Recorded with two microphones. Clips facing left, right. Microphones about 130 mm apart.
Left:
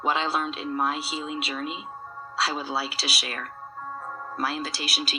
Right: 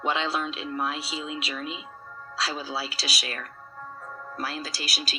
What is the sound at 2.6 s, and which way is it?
Speech, centre (ahead or behind).